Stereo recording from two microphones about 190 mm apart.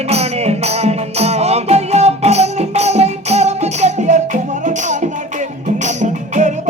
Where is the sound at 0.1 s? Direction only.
35° right (ahead or behind).